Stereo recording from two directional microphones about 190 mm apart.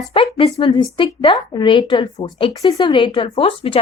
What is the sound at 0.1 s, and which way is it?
A woman's voice, 25° left (ahead or behind).